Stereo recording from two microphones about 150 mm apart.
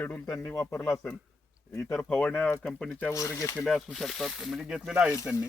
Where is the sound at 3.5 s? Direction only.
Centre (ahead or behind).